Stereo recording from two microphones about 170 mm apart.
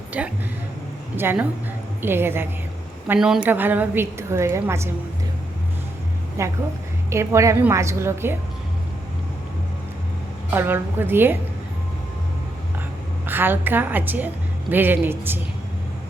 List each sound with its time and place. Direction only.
0.1 s a woman's voice: 10° right (ahead or behind)
6.4 s a woman's voice: 20° right (ahead or behind)
10.5 s a woman's voice: 10° right (ahead or behind)
13.2 s a woman's voice: 10° right (ahead or behind)